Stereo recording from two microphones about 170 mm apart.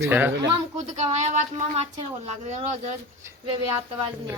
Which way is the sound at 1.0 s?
40° right (ahead or behind).